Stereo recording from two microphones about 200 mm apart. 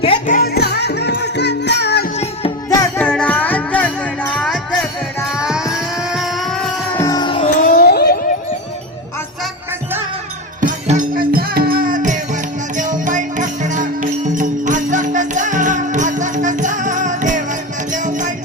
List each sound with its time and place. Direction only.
0.3 s music: 50° left (ahead or behind)
2.1 s music: 30° left (ahead or behind)
2.6 s music: 15° left (ahead or behind)
7.0 s music: 20° left (ahead or behind); by 8.2 s 50° left (ahead or behind)
10.6 s music: 40° right (ahead or behind)